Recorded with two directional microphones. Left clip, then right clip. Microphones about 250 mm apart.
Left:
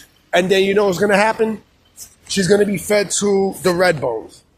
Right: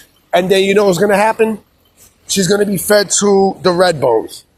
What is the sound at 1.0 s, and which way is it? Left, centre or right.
Speech, centre.